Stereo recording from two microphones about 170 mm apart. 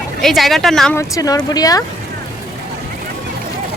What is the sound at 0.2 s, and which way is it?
Speech, centre (ahead or behind).